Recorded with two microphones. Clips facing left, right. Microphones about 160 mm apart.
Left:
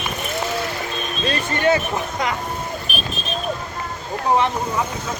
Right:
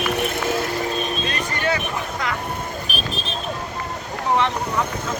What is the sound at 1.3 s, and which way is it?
Music, 25° left (ahead or behind).